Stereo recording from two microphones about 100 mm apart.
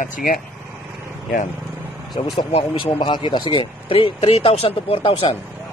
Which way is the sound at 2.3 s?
50° left (ahead or behind).